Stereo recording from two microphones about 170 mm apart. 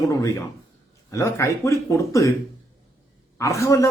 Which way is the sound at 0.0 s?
20° left (ahead or behind).